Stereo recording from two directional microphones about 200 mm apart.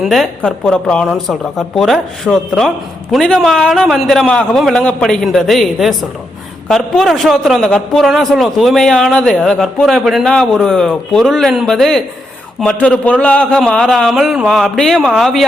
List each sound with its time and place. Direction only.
0.0 s speech: centre (ahead or behind)